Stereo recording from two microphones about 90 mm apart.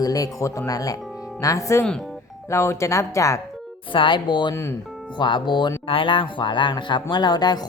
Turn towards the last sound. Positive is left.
turn(degrees=50)  # may be behind; listen again after turning